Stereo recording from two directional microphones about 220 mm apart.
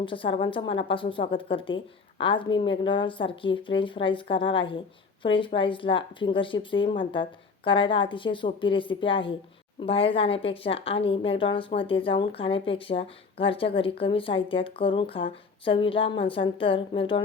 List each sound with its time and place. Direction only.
0.0 s speech: 25° left (ahead or behind)